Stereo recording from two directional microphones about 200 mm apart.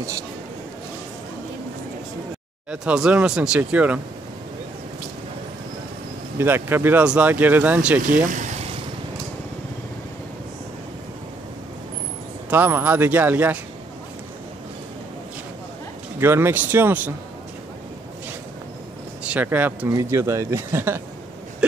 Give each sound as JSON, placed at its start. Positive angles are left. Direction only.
{"t": 2.7, "sound": "speech", "side_deg": -5}
{"t": 6.3, "sound": "speech", "side_deg": -10}
{"t": 8.3, "sound": "a sound", "side_deg": -40}
{"t": 12.4, "sound": "speech", "side_deg": -10}
{"t": 16.2, "sound": "speech", "side_deg": -10}
{"t": 19.3, "sound": "speech", "side_deg": -10}